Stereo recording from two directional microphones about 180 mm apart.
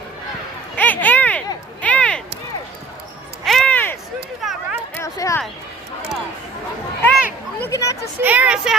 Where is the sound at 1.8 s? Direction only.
5° left (ahead or behind).